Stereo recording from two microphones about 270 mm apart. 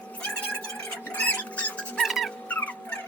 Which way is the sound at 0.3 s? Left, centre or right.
Centre.